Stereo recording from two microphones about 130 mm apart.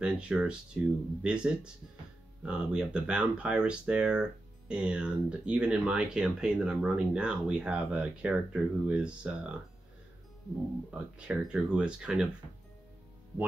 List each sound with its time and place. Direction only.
0.0 s speech: 10° right (ahead or behind)
10.9 s speech: 10° right (ahead or behind)